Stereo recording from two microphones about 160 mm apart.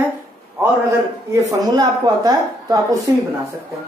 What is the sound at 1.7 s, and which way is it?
Speech, 25° right (ahead or behind).